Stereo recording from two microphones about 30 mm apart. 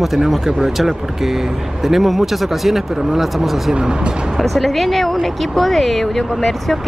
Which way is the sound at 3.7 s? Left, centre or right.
Right.